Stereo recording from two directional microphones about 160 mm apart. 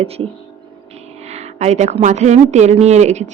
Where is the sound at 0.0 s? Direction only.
40° right (ahead or behind).